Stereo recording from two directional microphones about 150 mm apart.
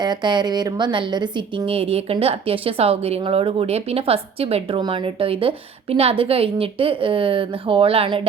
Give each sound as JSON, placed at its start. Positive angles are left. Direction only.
{"t": 0.0, "sound": "a woman's voice", "side_deg": -30}